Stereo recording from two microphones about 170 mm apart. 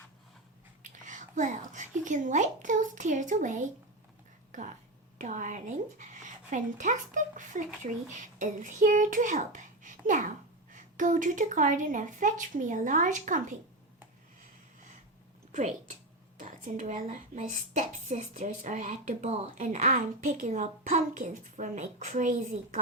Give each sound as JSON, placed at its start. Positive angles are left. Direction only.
{"t": 0.8, "sound": "speech", "side_deg": -50}
{"t": 5.1, "sound": "a child's voice", "side_deg": -50}
{"t": 15.5, "sound": "a woman's voice", "side_deg": -45}